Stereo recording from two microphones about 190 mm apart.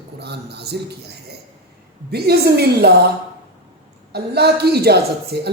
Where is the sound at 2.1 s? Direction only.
55° right (ahead or behind).